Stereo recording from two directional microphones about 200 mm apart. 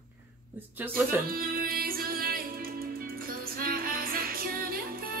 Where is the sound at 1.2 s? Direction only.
45° right (ahead or behind).